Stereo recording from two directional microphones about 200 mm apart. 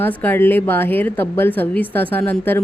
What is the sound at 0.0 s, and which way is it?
A woman's voice, 10° left (ahead or behind).